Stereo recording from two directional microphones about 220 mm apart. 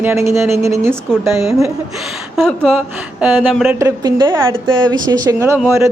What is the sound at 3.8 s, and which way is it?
Speech, 15° right (ahead or behind).